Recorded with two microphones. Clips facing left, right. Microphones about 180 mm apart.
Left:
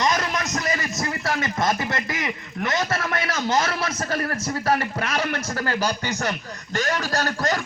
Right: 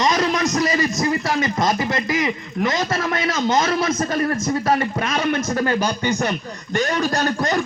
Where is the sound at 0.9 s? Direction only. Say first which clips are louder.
Right 6 dB; 15° right (ahead or behind).